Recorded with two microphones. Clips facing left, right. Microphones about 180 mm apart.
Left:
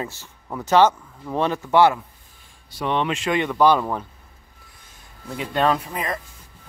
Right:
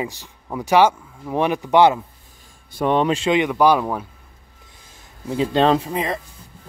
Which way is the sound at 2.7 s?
45° right (ahead or behind).